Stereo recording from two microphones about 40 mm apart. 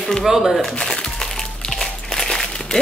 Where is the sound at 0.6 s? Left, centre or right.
Centre.